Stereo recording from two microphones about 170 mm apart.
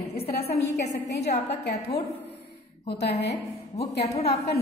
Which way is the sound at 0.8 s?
90° left.